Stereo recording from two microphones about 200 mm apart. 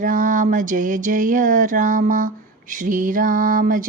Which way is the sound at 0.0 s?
40° right (ahead or behind).